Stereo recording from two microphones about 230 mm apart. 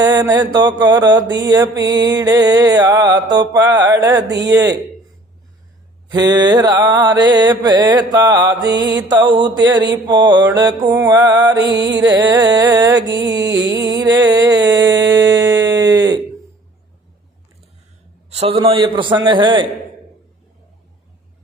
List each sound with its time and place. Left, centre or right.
0.0 s mantra: centre
6.1 s mantra: centre
11.7 s music: right
12.1 s mantra: centre
15.1 s a sound: centre
18.3 s a man's voice: right